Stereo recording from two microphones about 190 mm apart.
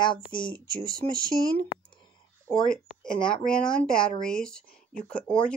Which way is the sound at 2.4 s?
5° left (ahead or behind).